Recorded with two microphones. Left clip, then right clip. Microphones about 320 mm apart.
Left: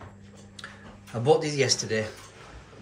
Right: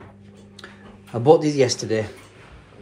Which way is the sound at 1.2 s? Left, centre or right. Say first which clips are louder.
Right 7 dB; centre.